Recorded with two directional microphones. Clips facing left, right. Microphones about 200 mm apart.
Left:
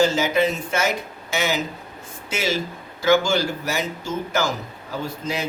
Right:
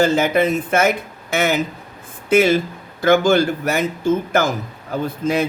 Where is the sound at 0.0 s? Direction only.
55° right (ahead or behind).